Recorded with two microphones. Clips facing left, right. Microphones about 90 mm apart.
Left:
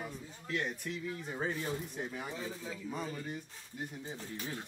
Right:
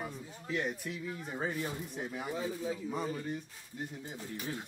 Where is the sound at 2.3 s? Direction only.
45° right (ahead or behind).